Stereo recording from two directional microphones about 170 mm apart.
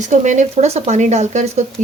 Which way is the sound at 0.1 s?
45° right (ahead or behind).